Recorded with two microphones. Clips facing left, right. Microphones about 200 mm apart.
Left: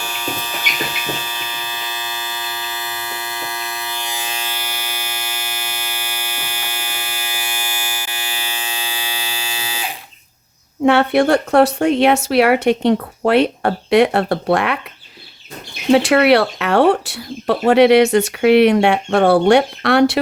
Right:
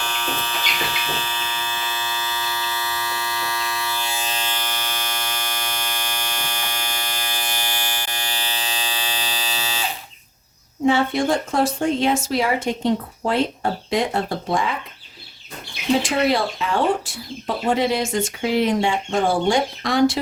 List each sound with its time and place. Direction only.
0.0 s hum: 10° left (ahead or behind)
10.8 s speech: 65° left (ahead or behind)
15.9 s speech: 70° left (ahead or behind)